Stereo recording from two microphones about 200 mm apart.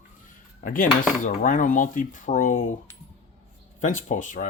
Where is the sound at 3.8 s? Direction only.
40° left (ahead or behind).